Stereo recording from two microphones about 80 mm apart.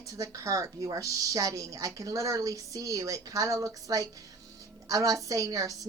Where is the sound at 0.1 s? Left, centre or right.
Right.